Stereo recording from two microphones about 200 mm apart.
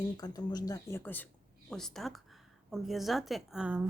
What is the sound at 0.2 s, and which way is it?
A woman's voice, 20° left (ahead or behind).